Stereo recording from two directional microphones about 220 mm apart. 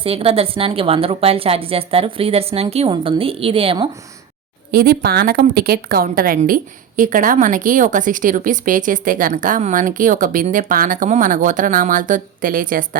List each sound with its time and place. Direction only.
0.0 s a woman's voice: 25° right (ahead or behind)
4.7 s a woman's voice: 45° right (ahead or behind)